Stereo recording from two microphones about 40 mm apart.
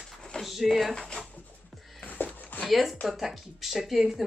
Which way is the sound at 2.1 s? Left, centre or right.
Left.